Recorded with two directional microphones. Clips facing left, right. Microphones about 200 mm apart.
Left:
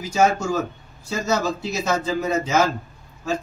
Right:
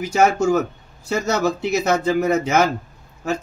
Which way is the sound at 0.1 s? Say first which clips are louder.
Right 3 dB; 65° right (ahead or behind).